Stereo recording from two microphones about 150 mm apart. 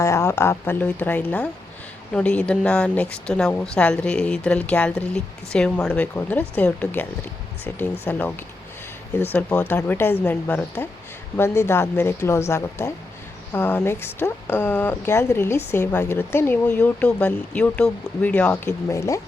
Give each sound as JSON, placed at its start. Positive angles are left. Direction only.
{"t": 0.0, "sound": "speech", "side_deg": 20}
{"t": 18.9, "sound": "speech", "side_deg": 20}